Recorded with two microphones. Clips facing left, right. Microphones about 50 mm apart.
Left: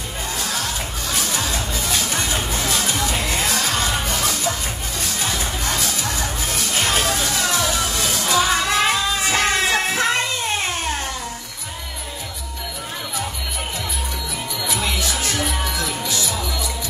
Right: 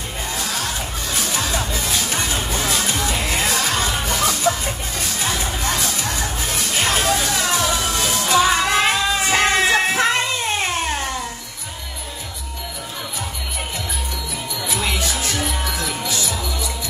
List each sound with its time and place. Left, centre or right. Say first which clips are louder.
0.4 s music: even; right
14.6 s music: even; right
16.0 s music: even; right